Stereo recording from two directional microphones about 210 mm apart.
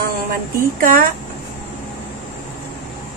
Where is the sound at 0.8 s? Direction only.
40° right (ahead or behind).